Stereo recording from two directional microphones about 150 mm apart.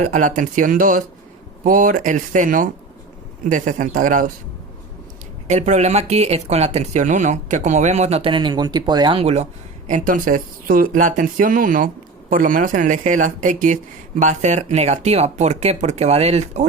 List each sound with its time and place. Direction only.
0.0 s speech: 60° right (ahead or behind)
5.5 s speech: 50° right (ahead or behind)